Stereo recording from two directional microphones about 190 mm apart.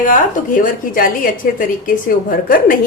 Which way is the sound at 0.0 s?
45° left (ahead or behind).